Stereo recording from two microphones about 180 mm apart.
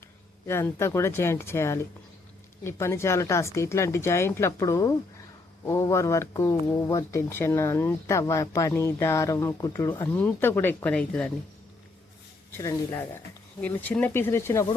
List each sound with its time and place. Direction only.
0.4 s speech: 15° left (ahead or behind)
12.5 s speech: 15° left (ahead or behind)